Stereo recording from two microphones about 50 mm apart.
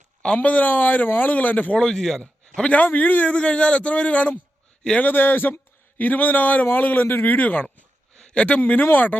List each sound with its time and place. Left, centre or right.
0.3 s a man's voice: left
1.8 s a man's voice: centre
2.6 s a man's voice: left
4.9 s a man's voice: left
8.1 s a sound: centre
8.4 s a man's voice: left